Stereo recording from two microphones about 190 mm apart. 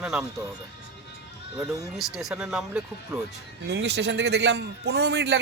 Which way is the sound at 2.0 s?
Centre (ahead or behind).